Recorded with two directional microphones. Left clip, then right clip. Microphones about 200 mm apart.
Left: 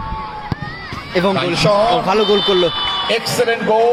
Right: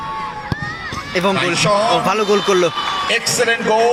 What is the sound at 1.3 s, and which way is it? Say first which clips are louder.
Speech: even; 50° left (ahead or behind).